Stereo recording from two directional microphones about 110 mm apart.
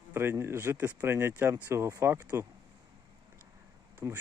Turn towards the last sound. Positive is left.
turn(degrees=-30)  # may be behind; listen again after turning